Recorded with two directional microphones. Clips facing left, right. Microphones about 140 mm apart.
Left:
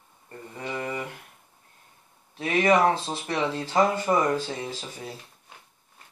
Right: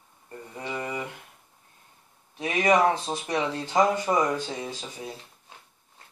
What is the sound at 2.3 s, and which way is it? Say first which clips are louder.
Speech: left 1 dB; 20° right (ahead or behind).